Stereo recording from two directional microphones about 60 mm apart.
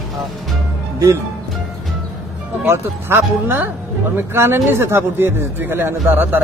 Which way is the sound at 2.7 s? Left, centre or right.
Right.